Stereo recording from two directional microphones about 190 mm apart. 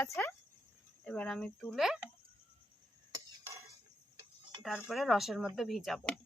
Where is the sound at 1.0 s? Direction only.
5° left (ahead or behind).